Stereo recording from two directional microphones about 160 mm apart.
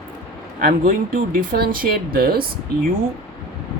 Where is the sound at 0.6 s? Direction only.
60° right (ahead or behind).